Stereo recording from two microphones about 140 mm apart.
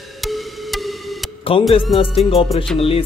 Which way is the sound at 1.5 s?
40° left (ahead or behind).